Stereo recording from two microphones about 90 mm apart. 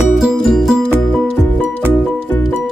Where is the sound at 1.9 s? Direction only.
25° left (ahead or behind).